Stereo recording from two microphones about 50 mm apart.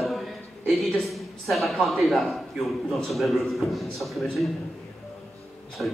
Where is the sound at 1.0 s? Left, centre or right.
Centre.